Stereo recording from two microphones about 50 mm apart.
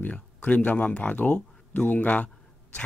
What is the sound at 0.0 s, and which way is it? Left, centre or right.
Speech, left.